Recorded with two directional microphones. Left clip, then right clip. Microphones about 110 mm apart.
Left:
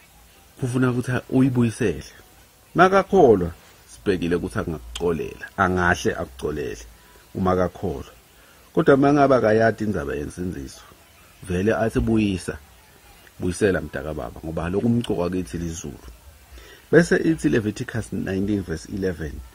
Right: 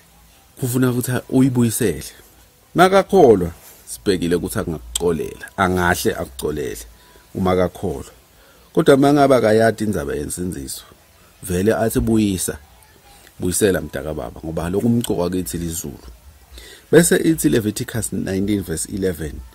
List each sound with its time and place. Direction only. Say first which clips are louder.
0.7 s speech: right 3 dB; 20° right (ahead or behind)
9.1 s speech: right 3 dB; 10° right (ahead or behind)
17.1 s speech: right 4 dB; 20° right (ahead or behind)
18.4 s speech: right 4 dB; 35° right (ahead or behind)
18.7 s speech: right 4 dB; 15° right (ahead or behind)